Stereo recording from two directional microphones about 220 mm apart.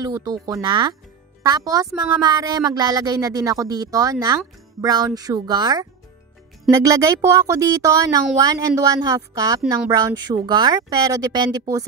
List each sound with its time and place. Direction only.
0.0 s speech: 15° right (ahead or behind)